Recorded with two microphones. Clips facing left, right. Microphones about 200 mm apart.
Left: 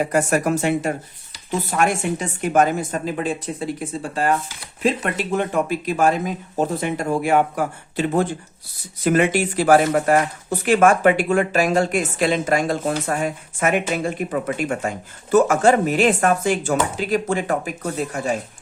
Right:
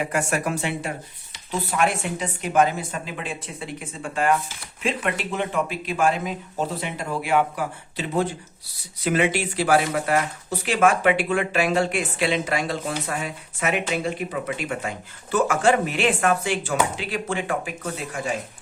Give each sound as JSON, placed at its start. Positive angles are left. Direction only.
{"t": 0.0, "sound": "speech", "side_deg": 40}